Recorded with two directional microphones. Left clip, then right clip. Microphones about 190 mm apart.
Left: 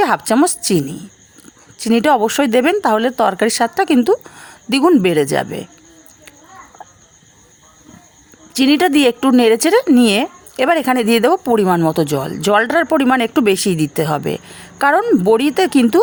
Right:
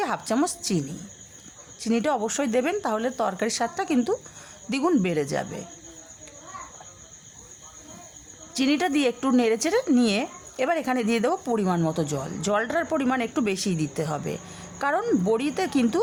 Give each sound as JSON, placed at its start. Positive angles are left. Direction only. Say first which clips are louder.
{"t": 0.0, "sound": "a woman's voice", "louder": "left 12 dB", "side_deg": 40}
{"t": 8.5, "sound": "speech", "louder": "left 11 dB", "side_deg": 40}